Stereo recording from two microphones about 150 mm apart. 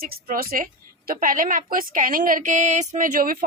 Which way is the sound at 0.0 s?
75° right (ahead or behind).